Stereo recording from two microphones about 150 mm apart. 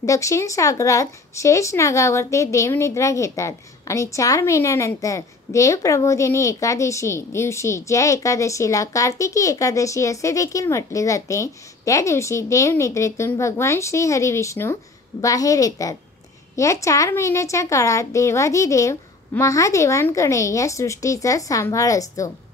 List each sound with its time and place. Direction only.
0.0 s speech: 20° left (ahead or behind)